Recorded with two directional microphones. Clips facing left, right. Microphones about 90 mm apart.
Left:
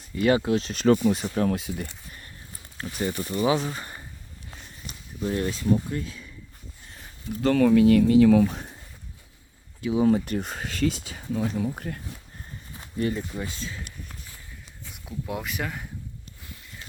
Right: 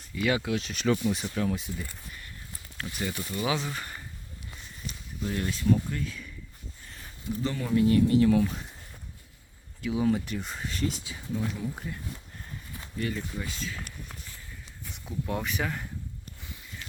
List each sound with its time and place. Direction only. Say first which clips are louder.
0.1 s speech: left 6 dB; 35° left (ahead or behind)
1.5 s speech: left 4 dB; 65° left (ahead or behind)
2.7 s speech: left 5 dB; 35° left (ahead or behind)
5.2 s speech: left 3 dB; 30° left (ahead or behind)
7.4 s speech: left 8 dB; 75° left (ahead or behind)
9.8 s speech: left 5 dB; 30° left (ahead or behind); by 10.5 s 45° left (ahead or behind)
10.5 s speech: left 4 dB; 85° left; by 11.9 s 55° left (ahead or behind)
12.7 s walk: left 6 dB; 30° left (ahead or behind)
13.1 s speech: left 3 dB; 25° left (ahead or behind)
14.8 s speech: even; 5° left (ahead or behind)